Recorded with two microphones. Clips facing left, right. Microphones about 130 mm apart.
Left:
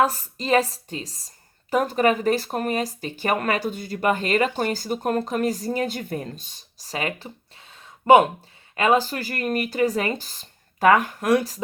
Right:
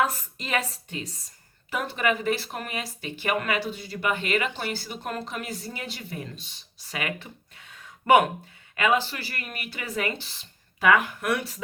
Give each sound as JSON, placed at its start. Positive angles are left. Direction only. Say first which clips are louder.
{"t": 0.0, "sound": "speech", "louder": "left 5 dB", "side_deg": 35}